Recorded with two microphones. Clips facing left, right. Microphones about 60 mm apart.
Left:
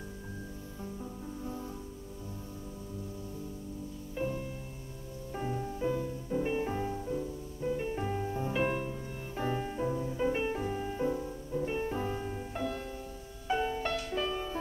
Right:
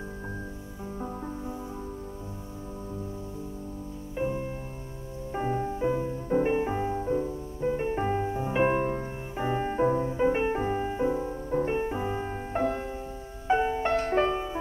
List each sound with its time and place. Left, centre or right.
4.1 s music: right
6.2 s music: right
12.3 s music: right
13.9 s music: right
14.3 s music: right